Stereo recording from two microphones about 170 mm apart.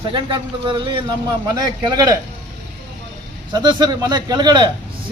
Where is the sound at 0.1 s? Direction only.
30° right (ahead or behind).